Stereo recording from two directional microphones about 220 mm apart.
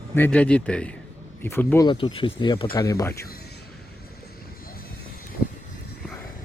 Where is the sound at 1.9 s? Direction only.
20° left (ahead or behind).